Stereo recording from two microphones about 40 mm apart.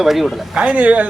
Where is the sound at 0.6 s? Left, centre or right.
Right.